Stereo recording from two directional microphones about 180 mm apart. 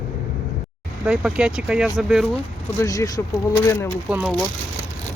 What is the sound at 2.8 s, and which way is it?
Speech, 20° left (ahead or behind).